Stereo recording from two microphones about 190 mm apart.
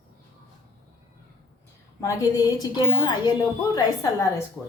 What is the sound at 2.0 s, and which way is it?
A woman's voice, 20° left (ahead or behind).